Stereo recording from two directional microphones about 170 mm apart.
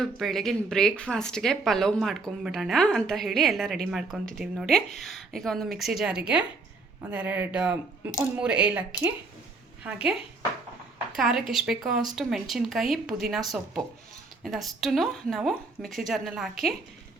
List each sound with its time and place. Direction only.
0.0 s speech: centre (ahead or behind)
9.8 s speech: 5° right (ahead or behind)